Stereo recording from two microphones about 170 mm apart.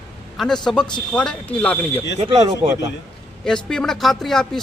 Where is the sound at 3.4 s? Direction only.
5° left (ahead or behind).